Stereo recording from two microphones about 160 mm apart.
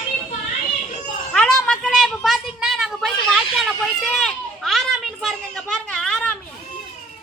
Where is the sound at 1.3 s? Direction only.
5° left (ahead or behind).